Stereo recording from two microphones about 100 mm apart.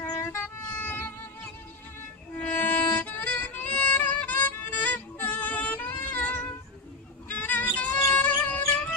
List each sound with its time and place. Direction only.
0.2 s music: 25° left (ahead or behind)